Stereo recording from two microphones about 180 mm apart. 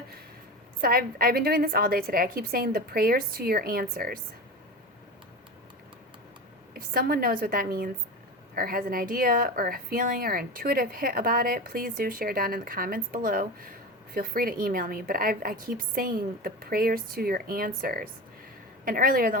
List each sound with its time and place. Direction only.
0.8 s a woman's voice: 55° right (ahead or behind)
6.7 s a woman's voice: 55° right (ahead or behind)